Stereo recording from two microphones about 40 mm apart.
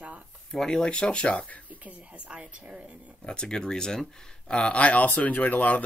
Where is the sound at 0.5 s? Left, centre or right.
Centre.